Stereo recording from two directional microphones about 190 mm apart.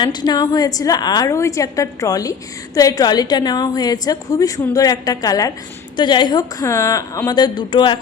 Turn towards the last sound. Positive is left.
turn(degrees=25)  # may be behind; listen again after turning